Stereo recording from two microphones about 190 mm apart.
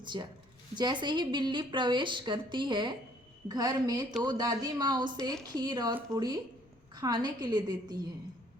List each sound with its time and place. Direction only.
0.0 s a woman's voice: 25° right (ahead or behind)